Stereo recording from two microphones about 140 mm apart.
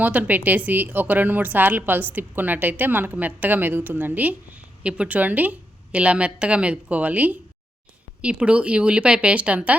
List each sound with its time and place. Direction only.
0.0 s a woman's voice: 10° right (ahead or behind)